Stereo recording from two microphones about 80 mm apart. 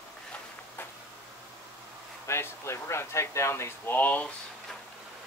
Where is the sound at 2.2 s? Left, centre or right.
Left.